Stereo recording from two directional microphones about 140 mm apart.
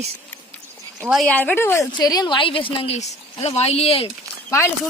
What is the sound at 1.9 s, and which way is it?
A woman's voice, 30° left (ahead or behind).